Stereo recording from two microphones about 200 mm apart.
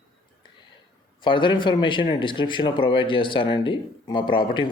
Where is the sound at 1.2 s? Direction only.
25° left (ahead or behind).